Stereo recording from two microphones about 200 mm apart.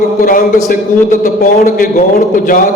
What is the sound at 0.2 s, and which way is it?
A man's voice, 45° left (ahead or behind).